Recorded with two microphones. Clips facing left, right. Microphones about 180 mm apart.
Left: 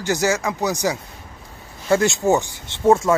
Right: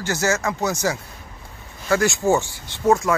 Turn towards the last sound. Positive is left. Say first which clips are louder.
# left 3 dB
turn(degrees=25)  # may be behind; listen again after turning